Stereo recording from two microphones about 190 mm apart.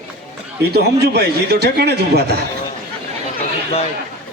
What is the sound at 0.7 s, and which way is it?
A man's voice, 60° right (ahead or behind).